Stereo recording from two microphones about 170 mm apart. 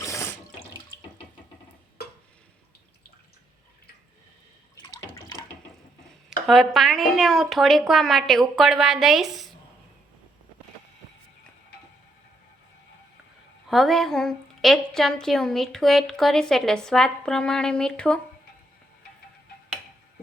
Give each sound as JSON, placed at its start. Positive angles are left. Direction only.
{"t": 0.0, "sound": "water", "side_deg": 15}
{"t": 6.5, "sound": "a woman's voice", "side_deg": 0}
{"t": 13.7, "sound": "a woman's voice", "side_deg": 0}